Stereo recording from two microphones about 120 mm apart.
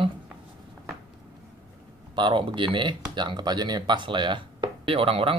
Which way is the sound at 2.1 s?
40° right (ahead or behind).